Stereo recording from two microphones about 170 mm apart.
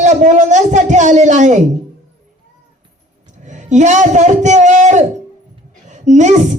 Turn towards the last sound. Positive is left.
turn(degrees=-45)  # may be behind; listen again after turning